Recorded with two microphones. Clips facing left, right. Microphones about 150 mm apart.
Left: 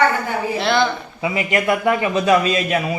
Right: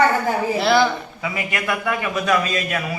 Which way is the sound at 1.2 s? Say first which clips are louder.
Left 10 dB; 30° left (ahead or behind).